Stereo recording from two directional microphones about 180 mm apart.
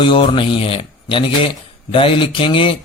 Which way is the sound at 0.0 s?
30° left (ahead or behind).